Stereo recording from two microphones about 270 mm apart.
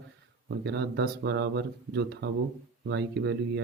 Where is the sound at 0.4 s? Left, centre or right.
Right.